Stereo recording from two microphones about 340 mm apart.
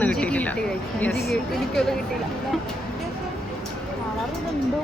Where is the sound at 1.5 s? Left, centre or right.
Centre.